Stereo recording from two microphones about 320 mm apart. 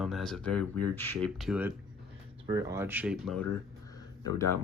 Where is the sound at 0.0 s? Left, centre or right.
Centre.